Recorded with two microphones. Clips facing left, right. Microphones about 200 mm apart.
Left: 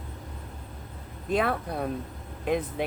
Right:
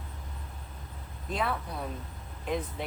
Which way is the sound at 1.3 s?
60° left (ahead or behind).